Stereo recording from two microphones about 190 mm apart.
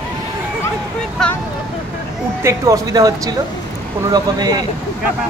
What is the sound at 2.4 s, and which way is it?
Speech, 20° right (ahead or behind).